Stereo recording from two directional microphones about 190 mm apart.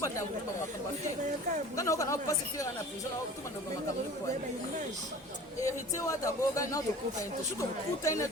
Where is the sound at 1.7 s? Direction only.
15° left (ahead or behind).